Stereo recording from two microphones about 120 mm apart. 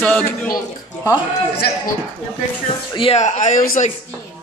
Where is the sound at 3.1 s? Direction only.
80° left.